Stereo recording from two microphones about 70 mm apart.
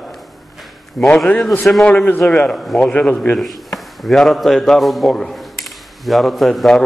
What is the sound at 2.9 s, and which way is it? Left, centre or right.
Speech, centre.